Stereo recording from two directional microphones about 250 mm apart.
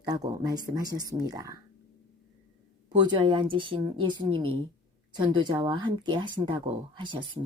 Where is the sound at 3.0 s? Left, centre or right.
Centre.